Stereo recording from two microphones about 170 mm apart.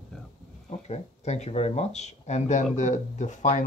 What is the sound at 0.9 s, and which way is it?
Speech, 40° left (ahead or behind).